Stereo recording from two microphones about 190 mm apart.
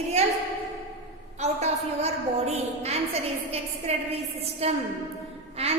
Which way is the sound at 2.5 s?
35° right (ahead or behind).